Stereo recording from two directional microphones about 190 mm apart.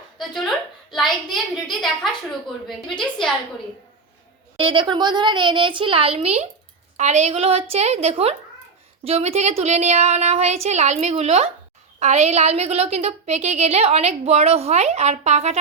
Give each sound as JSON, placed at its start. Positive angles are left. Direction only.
{"t": 0.2, "sound": "a sound", "side_deg": 0}
{"t": 3.0, "sound": "a woman's voice", "side_deg": 5}
{"t": 4.5, "sound": "a child's voice", "side_deg": -25}